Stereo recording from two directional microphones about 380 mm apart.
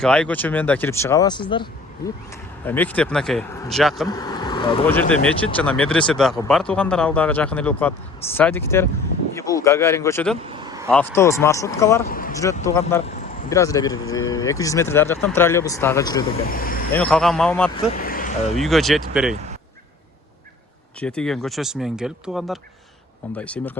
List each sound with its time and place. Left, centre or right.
0.0 s speech: centre
2.6 s speech: centre
4.2 s speech: centre
10.5 s vehicle: centre
10.9 s speech: centre
12.0 s speech: left
12.3 s speech: centre
16.5 s speech: left
16.9 s speech: centre; by 18.3 s left
18.5 s speech: centre
21.0 s speech: centre